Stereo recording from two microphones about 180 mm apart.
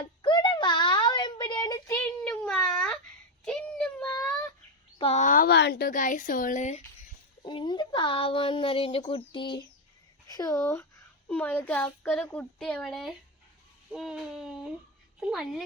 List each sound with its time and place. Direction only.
0.2 s a sound: 25° left (ahead or behind)
1.9 s child singing: 10° left (ahead or behind)
4.9 s a woman's voice: 35° left (ahead or behind)
7.4 s speech: 25° left (ahead or behind); by 15.6 s centre (ahead or behind)